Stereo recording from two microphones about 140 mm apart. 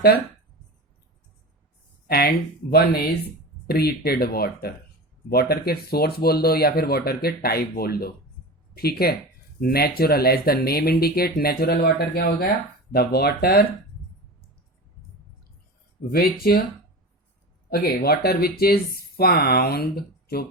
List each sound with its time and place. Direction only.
2.0 s speech: 90° left
16.1 s speech: 90° left
17.7 s speech: 90° left